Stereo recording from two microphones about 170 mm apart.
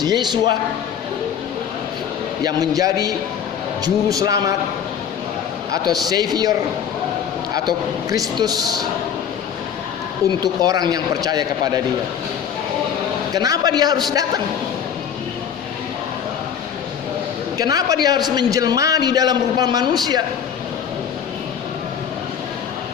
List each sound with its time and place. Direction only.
0.0 s a man's voice: 25° right (ahead or behind)
2.4 s a man's voice: 20° right (ahead or behind)
5.7 s a man's voice: 20° right (ahead or behind)
8.4 s a man's voice: 25° right (ahead or behind)
10.4 s a man's voice: 25° right (ahead or behind)
13.3 s a man's voice: 20° right (ahead or behind)
17.6 s a man's voice: 20° right (ahead or behind)